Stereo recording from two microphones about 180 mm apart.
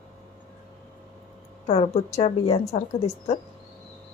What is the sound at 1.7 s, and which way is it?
A woman's voice, 35° left (ahead or behind).